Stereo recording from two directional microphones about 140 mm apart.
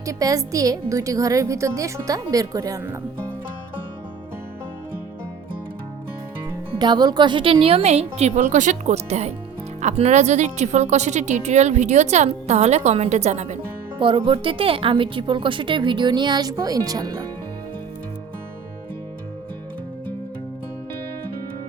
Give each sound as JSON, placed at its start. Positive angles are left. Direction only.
{"t": 0.0, "sound": "a woman's voice", "side_deg": -25}
{"t": 6.7, "sound": "a woman's voice", "side_deg": -30}
{"t": 14.0, "sound": "a woman's voice", "side_deg": -35}